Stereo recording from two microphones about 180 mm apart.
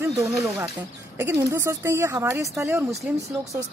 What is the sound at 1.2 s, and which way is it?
Speech, 15° right (ahead or behind).